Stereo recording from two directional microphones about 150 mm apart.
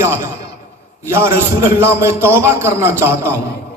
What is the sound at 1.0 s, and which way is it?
A man's voice, 15° right (ahead or behind).